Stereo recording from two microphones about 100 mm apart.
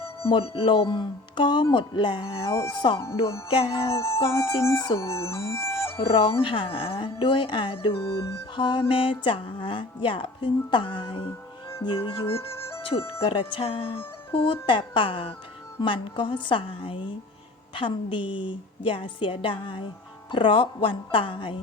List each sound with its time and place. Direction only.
0.2 s speech: 65° left (ahead or behind)
3.5 s speech: 60° left (ahead or behind)
3.9 s music: 25° left (ahead or behind)
6.0 s speech: 60° left (ahead or behind)
14.3 s speech: 55° left (ahead or behind)